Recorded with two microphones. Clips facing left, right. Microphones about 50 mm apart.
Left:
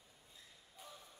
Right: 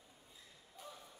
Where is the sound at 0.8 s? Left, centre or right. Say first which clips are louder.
Right 3 dB; centre.